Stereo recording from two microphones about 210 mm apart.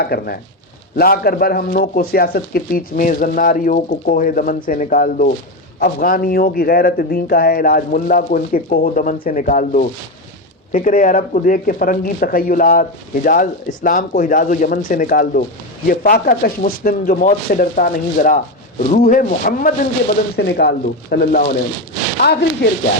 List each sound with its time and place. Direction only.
0.0 s a man's voice: 45° left (ahead or behind)